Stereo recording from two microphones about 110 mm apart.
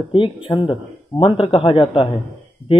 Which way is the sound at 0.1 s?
50° left (ahead or behind).